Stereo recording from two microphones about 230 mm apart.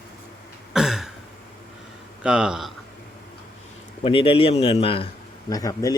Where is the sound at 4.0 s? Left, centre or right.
Left.